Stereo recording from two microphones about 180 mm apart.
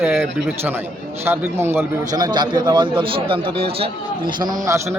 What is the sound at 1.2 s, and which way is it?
A man's voice, 15° right (ahead or behind).